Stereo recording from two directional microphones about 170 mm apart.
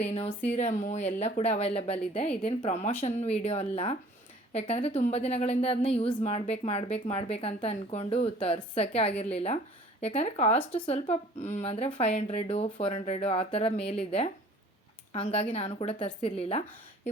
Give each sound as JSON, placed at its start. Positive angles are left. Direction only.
{"t": 0.4, "sound": "speech", "side_deg": 40}
{"t": 10.6, "sound": "speech", "side_deg": 10}
{"t": 10.8, "sound": "speech", "side_deg": 35}